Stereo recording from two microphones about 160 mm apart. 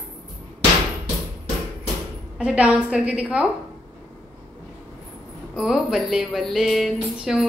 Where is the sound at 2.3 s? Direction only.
5° right (ahead or behind).